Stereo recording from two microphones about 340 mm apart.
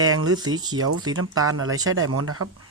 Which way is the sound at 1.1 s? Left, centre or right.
Right.